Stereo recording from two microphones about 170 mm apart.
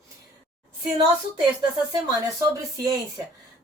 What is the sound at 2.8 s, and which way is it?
Speech, 20° right (ahead or behind).